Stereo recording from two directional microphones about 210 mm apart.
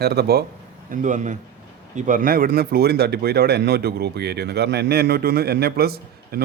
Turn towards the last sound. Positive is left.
turn(degrees=-50)  # may be behind; listen again after turning